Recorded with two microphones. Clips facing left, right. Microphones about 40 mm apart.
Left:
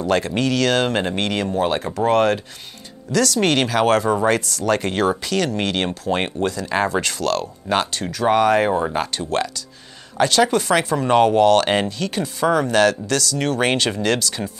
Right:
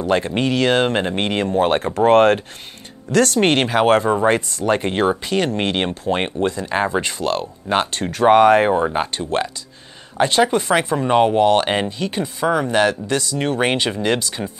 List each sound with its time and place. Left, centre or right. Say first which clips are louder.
0.4 s speech: right 3 dB; right
8.9 s speech: right 1 dB; right